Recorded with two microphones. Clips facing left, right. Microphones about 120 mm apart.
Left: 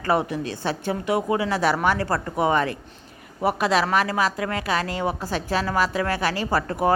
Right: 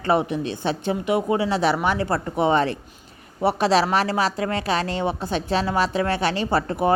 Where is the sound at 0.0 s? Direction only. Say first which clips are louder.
Right 2 dB; 20° right (ahead or behind).